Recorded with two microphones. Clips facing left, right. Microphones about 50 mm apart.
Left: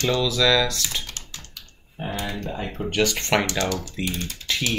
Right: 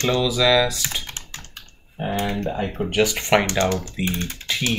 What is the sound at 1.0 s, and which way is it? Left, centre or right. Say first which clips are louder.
Computer keyboard: right 2 dB; right.